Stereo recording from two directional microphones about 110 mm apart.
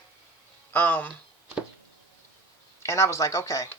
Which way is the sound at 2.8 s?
25° left (ahead or behind).